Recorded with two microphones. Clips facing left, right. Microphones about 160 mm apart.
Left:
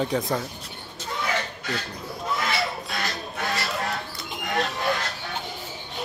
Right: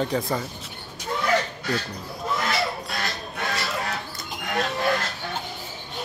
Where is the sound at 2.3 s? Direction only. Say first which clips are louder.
Right 1 dB; centre (ahead or behind).